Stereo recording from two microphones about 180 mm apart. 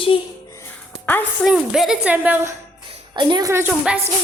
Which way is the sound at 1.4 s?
Centre (ahead or behind).